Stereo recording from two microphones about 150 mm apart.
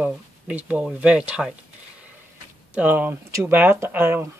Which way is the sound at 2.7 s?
10° right (ahead or behind).